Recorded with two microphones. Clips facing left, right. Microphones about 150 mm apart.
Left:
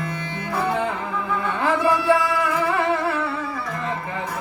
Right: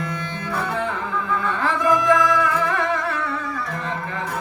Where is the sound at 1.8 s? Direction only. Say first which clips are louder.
Right 2 dB; 30° left (ahead or behind).